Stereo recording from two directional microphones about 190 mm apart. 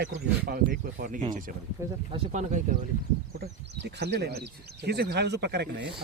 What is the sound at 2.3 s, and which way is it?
Speech, 40° right (ahead or behind).